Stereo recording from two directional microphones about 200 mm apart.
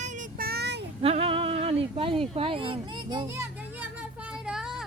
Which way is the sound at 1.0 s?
30° right (ahead or behind).